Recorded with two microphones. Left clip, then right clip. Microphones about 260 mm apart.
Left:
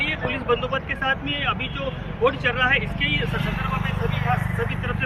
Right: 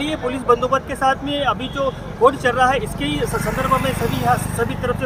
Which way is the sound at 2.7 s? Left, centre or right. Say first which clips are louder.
Even; centre.